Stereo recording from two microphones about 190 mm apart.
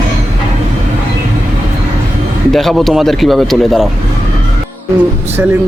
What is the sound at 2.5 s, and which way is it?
Speech, centre (ahead or behind).